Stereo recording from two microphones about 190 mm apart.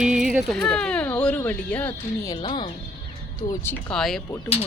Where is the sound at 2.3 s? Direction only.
25° left (ahead or behind).